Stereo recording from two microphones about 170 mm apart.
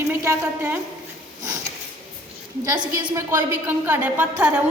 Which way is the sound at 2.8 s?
20° right (ahead or behind).